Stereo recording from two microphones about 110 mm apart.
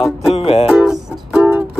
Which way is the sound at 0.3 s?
65° left (ahead or behind).